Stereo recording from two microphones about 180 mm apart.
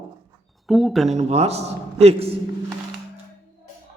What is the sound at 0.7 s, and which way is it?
Speech, centre (ahead or behind).